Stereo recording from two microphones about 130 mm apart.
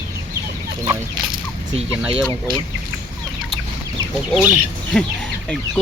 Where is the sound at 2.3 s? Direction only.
35° right (ahead or behind).